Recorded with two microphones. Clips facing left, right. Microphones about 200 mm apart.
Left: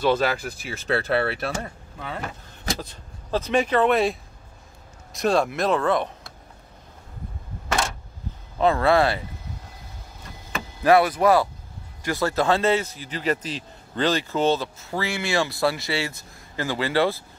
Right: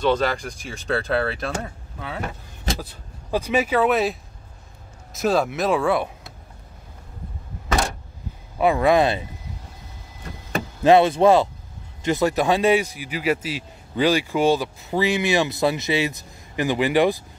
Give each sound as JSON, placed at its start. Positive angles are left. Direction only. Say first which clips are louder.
{"t": 0.0, "sound": "speech", "louder": "right 1 dB", "side_deg": 5}
{"t": 8.5, "sound": "a man's voice", "louder": "right 2 dB", "side_deg": -15}
{"t": 10.8, "sound": "a man's voice", "louder": "right 3 dB", "side_deg": -25}